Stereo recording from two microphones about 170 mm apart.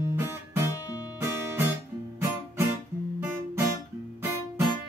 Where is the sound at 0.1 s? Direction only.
15° right (ahead or behind).